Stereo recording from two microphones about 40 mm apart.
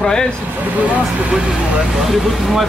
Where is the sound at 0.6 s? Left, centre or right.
Right.